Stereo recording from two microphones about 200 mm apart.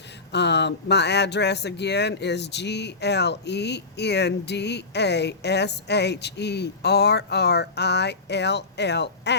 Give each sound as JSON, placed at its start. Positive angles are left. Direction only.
{"t": 0.3, "sound": "speech", "side_deg": 60}